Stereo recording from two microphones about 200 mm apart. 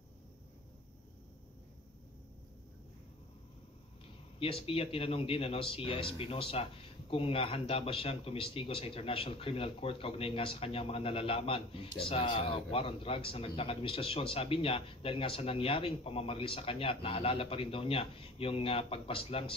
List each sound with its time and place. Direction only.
4.4 s speech: 25° left (ahead or behind)